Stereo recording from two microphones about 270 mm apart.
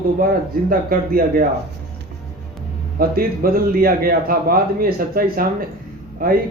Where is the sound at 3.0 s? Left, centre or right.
Right.